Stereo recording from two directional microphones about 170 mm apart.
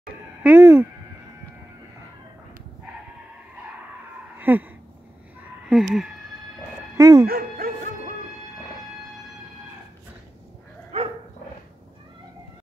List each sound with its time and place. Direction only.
0.4 s speech: 10° right (ahead or behind)
4.4 s a sound: 10° right (ahead or behind)
5.7 s speech: centre (ahead or behind)
7.0 s speech: 20° right (ahead or behind)
7.2 s music: 60° right (ahead or behind)